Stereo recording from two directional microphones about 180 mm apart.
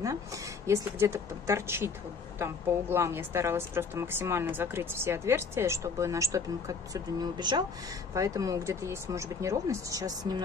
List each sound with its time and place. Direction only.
0.7 s a woman's voice: 15° right (ahead or behind)